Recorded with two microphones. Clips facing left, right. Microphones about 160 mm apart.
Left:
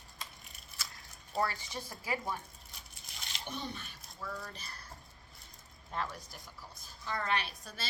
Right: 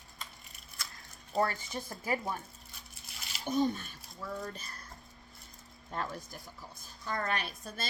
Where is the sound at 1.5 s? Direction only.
50° right (ahead or behind).